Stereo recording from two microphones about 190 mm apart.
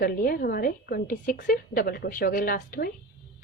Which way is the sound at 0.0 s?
50° left (ahead or behind).